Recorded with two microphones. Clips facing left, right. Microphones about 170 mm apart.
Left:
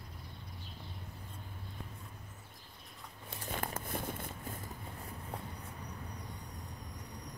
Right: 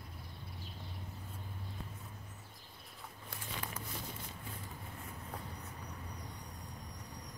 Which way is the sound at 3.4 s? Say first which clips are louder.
Left 5 dB; 50° left (ahead or behind).